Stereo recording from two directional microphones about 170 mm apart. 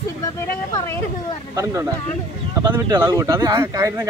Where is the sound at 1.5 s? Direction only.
15° right (ahead or behind).